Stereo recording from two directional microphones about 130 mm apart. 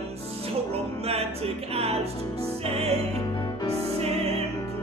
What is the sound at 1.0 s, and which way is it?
Music, 50° right (ahead or behind).